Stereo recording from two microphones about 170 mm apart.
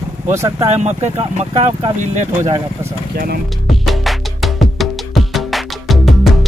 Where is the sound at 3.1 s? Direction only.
65° right (ahead or behind).